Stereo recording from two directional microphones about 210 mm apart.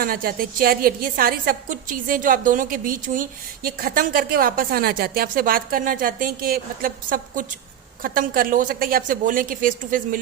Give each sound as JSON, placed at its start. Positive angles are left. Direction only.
{"t": 0.0, "sound": "a woman's voice", "side_deg": -45}